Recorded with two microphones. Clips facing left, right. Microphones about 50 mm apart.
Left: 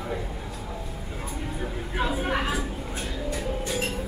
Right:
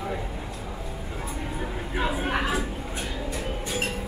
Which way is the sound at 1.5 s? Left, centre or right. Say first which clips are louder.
Left 1 dB; centre.